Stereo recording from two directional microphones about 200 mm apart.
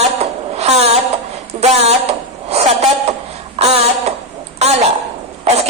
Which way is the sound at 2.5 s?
30° right (ahead or behind).